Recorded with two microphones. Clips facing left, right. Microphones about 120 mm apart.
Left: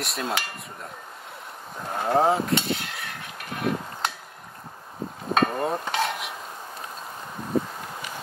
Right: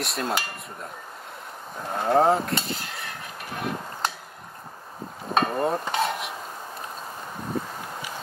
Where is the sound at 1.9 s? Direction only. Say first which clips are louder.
Right 1 dB; centre (ahead or behind).